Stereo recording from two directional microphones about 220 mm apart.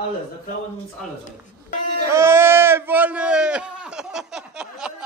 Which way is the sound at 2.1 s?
10° right (ahead or behind).